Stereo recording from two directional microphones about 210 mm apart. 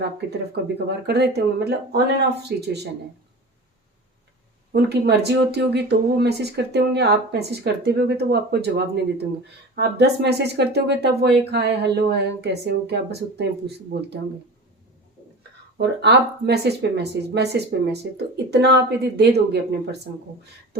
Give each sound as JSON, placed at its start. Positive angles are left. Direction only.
{"t": 0.5, "sound": "speech", "side_deg": -50}
{"t": 4.7, "sound": "speech", "side_deg": -50}
{"t": 16.0, "sound": "speech", "side_deg": -50}